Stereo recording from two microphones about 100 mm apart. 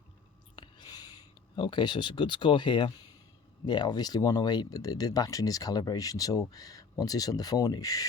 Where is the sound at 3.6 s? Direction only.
50° left (ahead or behind).